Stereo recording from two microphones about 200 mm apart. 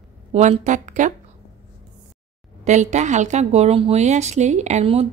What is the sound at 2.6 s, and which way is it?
A woman's voice, 35° right (ahead or behind).